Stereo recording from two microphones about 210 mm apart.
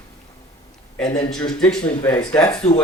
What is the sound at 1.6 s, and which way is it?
Speech, 5° left (ahead or behind).